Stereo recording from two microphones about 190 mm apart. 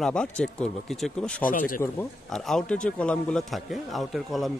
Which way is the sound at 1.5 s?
50° left (ahead or behind).